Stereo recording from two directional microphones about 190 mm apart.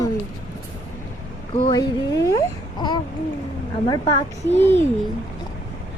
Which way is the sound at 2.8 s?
25° left (ahead or behind).